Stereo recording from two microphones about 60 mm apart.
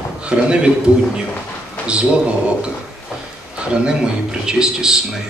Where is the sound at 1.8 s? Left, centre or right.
Centre.